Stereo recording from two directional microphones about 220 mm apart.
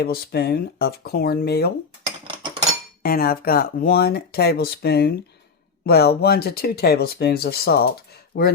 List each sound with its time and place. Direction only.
0.0 s speech: 45° left (ahead or behind)
3.0 s speech: 45° left (ahead or behind)